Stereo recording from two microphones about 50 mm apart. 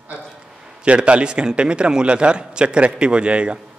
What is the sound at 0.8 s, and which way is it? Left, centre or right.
A man's voice, right.